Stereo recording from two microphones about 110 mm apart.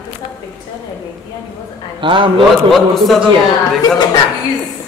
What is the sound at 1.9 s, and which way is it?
Speech, 50° right (ahead or behind).